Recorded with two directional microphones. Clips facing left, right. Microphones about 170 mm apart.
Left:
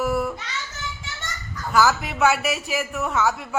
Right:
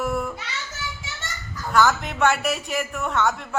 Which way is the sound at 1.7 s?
5° left (ahead or behind).